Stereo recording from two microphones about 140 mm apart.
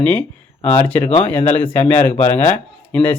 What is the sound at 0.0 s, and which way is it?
Speech, 10° left (ahead or behind).